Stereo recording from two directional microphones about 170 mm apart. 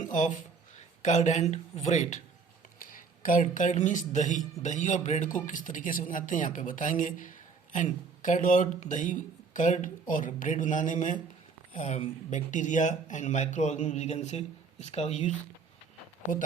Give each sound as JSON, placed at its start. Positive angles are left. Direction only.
{"t": 0.0, "sound": "speech", "side_deg": 45}
{"t": 2.7, "sound": "speech", "side_deg": 55}